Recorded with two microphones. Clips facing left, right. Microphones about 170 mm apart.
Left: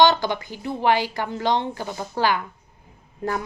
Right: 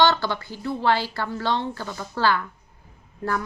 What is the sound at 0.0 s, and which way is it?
A woman's voice, 15° left (ahead or behind).